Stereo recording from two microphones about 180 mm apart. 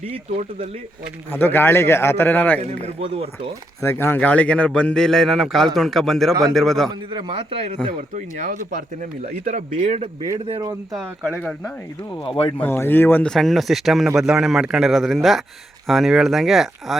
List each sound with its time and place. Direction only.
0.0 s speech: 35° right (ahead or behind)
1.3 s a man's voice: 10° left (ahead or behind)
2.6 s speech: 35° right (ahead or behind)
3.8 s a man's voice: 15° left (ahead or behind)
7.1 s a man's voice: 25° right (ahead or behind)
8.1 s speech: 45° right (ahead or behind)
10.4 s speech: 35° right (ahead or behind)
10.9 s a man's voice: centre (ahead or behind)
12.5 s a man's voice: 10° left (ahead or behind)